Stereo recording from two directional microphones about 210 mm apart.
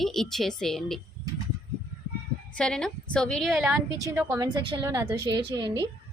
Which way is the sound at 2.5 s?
5° left (ahead or behind).